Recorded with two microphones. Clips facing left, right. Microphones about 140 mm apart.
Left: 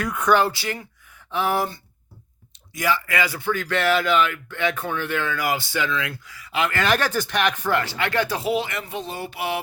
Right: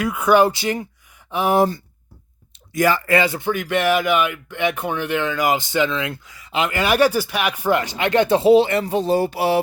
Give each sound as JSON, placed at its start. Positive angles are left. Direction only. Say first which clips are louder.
{"t": 0.0, "sound": "speech", "louder": "right 4 dB", "side_deg": -5}
{"t": 2.7, "sound": "speech", "louder": "right 6 dB", "side_deg": -45}
{"t": 3.1, "sound": "speech", "louder": "right 6 dB", "side_deg": -25}